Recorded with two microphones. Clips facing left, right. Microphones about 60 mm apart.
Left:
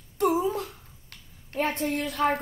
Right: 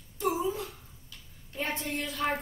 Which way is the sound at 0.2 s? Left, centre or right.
Left.